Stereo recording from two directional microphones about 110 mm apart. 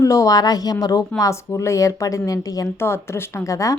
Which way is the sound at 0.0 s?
30° left (ahead or behind).